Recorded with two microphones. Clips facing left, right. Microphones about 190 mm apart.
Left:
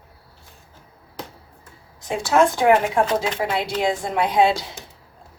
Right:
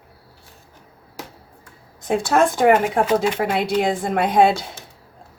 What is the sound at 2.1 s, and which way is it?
Speech, 55° right (ahead or behind).